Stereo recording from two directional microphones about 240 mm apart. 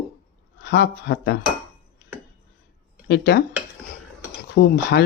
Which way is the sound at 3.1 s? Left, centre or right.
Left.